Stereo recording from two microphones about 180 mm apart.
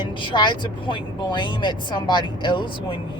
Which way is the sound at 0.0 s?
25° left (ahead or behind).